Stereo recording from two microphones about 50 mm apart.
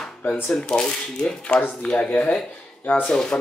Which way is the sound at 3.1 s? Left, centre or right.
Centre.